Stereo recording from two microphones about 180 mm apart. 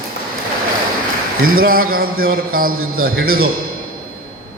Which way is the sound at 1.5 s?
55° right (ahead or behind).